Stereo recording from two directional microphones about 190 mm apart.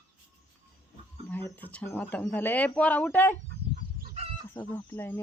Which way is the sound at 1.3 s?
10° left (ahead or behind).